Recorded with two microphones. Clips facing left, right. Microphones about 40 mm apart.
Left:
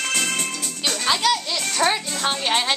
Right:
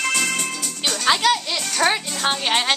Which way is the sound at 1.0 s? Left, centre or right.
Right.